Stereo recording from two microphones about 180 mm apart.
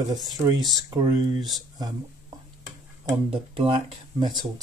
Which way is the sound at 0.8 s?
20° right (ahead or behind).